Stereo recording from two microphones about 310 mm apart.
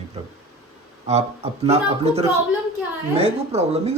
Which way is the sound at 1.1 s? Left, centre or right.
Right.